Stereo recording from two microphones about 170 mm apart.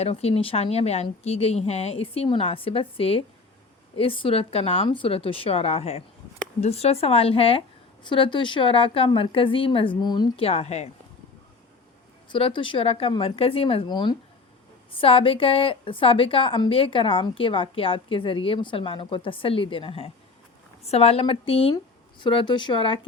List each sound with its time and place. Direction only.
0.0 s a woman's voice: 35° left (ahead or behind)
12.3 s a woman's voice: 30° left (ahead or behind)